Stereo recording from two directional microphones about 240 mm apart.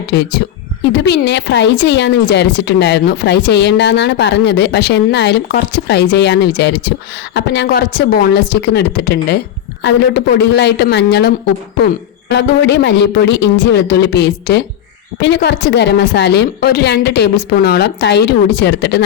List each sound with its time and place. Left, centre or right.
0.1 s speech: left